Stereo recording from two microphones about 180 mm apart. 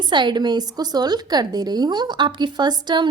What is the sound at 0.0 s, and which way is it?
A woman's voice, 25° right (ahead or behind).